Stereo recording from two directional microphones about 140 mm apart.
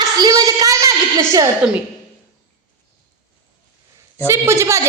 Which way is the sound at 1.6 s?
5° right (ahead or behind).